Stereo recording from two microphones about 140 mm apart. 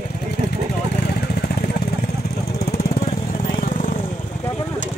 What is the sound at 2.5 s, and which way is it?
Lawn mower, 90° left.